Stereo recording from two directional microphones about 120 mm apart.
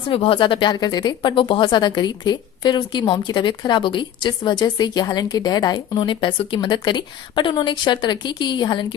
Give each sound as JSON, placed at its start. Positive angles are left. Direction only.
{"t": 0.1, "sound": "speech", "side_deg": 50}